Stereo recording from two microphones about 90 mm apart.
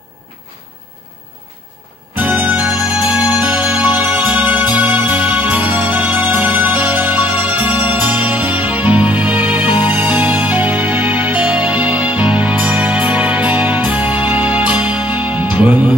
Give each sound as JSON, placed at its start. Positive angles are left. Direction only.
{"t": 2.1, "sound": "music", "side_deg": -15}